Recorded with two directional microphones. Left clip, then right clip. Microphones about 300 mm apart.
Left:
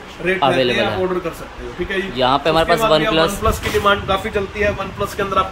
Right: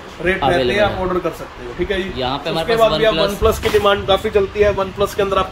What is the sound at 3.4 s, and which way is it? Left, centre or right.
Speech, right.